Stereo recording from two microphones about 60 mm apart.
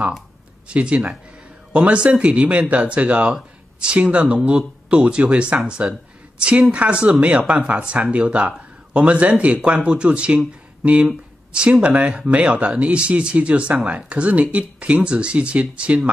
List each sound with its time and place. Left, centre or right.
0.7 s a man's voice: right